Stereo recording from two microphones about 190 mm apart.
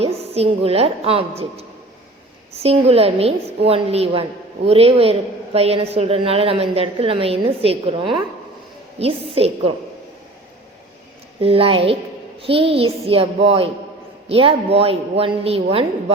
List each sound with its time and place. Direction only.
0.0 s a woman's voice: 30° right (ahead or behind)
11.3 s a child's voice: 30° right (ahead or behind)